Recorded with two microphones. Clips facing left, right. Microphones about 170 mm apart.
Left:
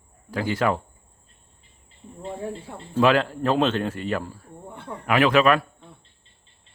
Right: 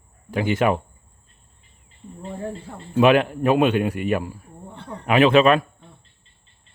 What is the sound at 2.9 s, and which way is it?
A man's voice, 20° right (ahead or behind).